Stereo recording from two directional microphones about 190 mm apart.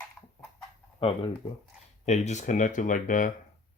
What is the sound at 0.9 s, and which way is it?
Speech, 30° left (ahead or behind).